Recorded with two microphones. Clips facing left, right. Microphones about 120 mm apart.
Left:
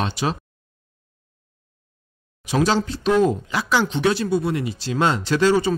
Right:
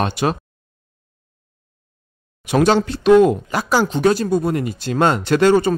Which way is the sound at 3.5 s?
45° right (ahead or behind).